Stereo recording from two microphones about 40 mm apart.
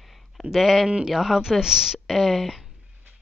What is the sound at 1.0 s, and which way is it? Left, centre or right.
Speech, centre.